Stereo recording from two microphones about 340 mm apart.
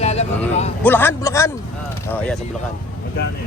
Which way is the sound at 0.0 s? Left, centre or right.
Centre.